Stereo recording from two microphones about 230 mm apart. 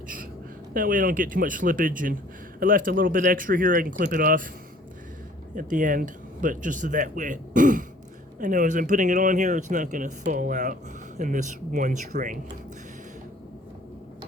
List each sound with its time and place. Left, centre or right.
0.7 s a man's voice: right
5.5 s a man's voice: right